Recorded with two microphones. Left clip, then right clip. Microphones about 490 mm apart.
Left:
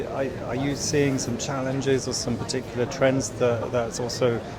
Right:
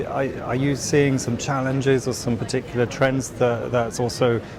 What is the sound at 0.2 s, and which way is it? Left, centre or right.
Speech, right.